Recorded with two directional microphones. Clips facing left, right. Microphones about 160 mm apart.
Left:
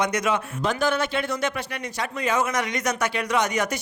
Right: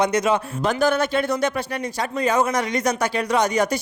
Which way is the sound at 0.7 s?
40° right (ahead or behind).